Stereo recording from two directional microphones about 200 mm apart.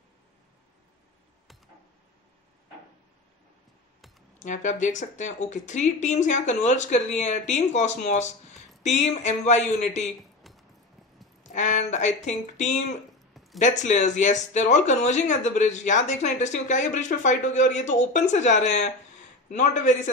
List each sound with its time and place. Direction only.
4.4 s speech: 40° left (ahead or behind)
10.4 s a sound: centre (ahead or behind)
11.4 s speech: 40° left (ahead or behind)
13.3 s zipper: centre (ahead or behind)
13.6 s speech: 40° left (ahead or behind)